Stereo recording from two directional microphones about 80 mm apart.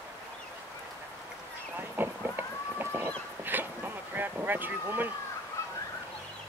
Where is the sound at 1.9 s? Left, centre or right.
Right.